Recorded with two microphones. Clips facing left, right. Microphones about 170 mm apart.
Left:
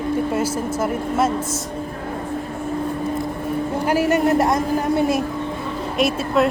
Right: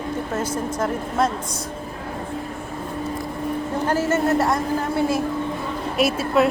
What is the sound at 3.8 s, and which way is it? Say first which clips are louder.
A woman's voice: left 3 dB; 15° left (ahead or behind).